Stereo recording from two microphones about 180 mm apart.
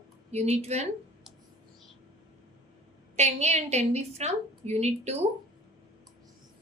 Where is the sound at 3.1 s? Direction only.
35° right (ahead or behind).